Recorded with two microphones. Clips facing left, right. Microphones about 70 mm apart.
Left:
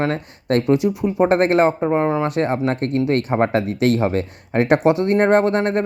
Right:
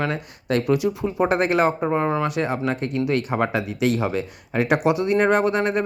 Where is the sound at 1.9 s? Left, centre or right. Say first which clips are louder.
Left 3 dB; left.